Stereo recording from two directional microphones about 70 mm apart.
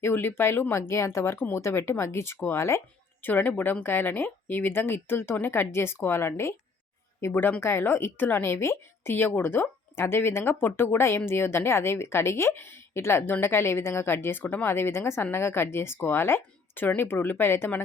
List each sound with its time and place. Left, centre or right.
0.0 s a woman's voice: left